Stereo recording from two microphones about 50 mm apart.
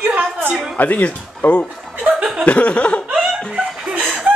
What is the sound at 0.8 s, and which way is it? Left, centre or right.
Speech, left.